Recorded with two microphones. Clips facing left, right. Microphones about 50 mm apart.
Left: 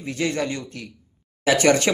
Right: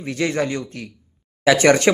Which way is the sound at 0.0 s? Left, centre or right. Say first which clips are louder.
Right 3 dB; right.